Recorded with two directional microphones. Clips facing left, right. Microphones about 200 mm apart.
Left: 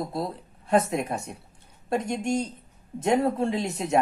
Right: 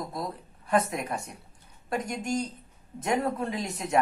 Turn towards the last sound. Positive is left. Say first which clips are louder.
# left 4 dB
turn(degrees=25)  # may be behind; listen again after turning